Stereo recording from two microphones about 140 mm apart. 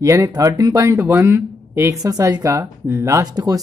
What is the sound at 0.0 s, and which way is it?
Speech, 25° right (ahead or behind).